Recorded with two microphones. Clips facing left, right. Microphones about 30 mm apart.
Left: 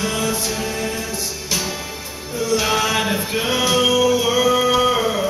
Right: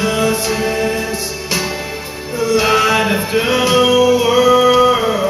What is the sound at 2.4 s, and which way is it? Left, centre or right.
Music, right.